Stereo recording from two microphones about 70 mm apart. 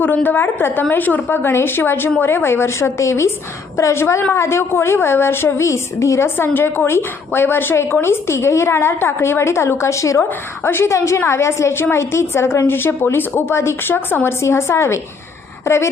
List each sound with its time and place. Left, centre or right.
0.0 s a woman's voice: left
10.2 s a woman's voice: left
14.4 s a woman's voice: left